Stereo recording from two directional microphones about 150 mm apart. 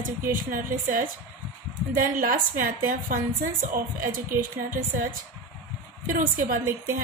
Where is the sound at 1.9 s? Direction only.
65° right (ahead or behind).